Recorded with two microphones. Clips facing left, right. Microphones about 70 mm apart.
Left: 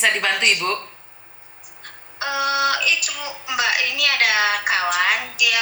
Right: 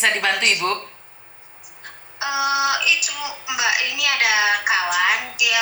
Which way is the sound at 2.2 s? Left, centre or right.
Left.